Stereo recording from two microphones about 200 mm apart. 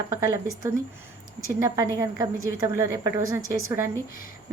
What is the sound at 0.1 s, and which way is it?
Speech, 15° right (ahead or behind).